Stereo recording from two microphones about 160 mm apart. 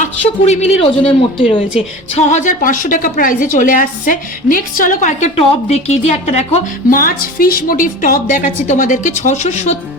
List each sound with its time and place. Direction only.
0.0 s a man's voice: 45° left (ahead or behind)
6.9 s a woman's voice: 65° left (ahead or behind); by 9.7 s 45° left (ahead or behind)